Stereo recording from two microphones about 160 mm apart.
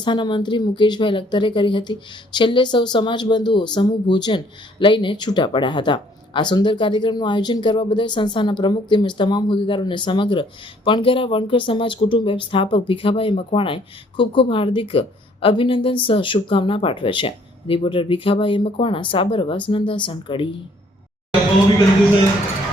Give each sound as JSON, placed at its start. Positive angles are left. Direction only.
{"t": 0.0, "sound": "speech", "side_deg": 30}